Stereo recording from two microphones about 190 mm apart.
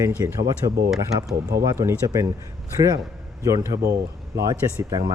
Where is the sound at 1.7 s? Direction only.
15° right (ahead or behind).